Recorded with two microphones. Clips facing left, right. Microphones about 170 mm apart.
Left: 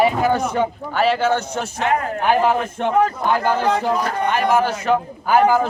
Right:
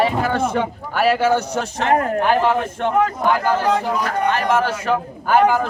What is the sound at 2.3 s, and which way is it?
Speech, 15° left (ahead or behind).